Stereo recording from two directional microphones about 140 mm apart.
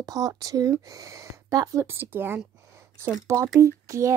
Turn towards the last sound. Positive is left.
turn(degrees=-20)  # may be behind; listen again after turning